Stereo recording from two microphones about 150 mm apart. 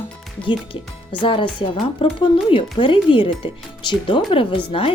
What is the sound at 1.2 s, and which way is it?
Speech, 35° left (ahead or behind).